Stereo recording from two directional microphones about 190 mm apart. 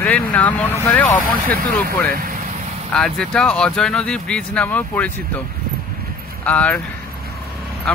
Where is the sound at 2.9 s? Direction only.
5° left (ahead or behind).